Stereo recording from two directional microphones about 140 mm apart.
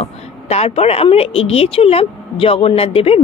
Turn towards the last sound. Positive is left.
turn(degrees=45)  # may be behind; listen again after turning